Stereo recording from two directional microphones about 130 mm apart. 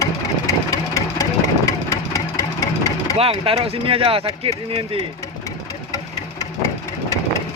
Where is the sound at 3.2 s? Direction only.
45° right (ahead or behind).